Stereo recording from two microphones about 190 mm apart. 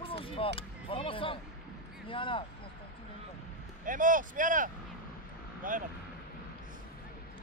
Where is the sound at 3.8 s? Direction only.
45° right (ahead or behind).